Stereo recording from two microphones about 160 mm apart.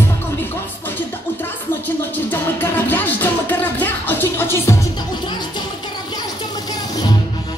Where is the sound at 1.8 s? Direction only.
10° left (ahead or behind).